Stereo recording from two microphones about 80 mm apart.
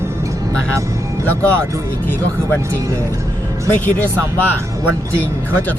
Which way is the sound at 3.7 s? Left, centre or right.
Left.